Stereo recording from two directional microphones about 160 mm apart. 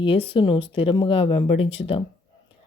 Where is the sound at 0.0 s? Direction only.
35° left (ahead or behind).